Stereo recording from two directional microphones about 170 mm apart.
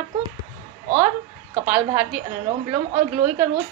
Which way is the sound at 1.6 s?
10° right (ahead or behind).